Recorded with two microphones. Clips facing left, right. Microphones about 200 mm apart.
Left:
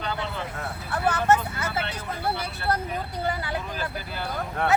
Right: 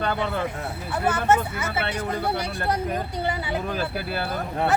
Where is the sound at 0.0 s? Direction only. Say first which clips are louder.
Right 5 dB; 55° right (ahead or behind).